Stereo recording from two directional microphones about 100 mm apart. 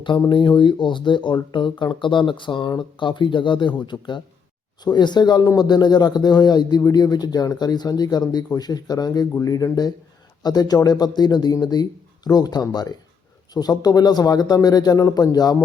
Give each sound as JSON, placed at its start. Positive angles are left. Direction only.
{"t": 0.3, "sound": "a man's voice", "side_deg": 50}